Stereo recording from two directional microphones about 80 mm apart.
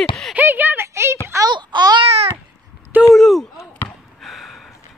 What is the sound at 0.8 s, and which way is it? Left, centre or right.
Speech, right.